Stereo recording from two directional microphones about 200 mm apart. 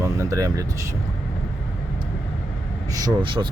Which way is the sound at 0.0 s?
15° right (ahead or behind).